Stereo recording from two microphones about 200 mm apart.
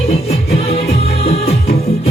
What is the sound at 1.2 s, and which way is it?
Music, 30° left (ahead or behind).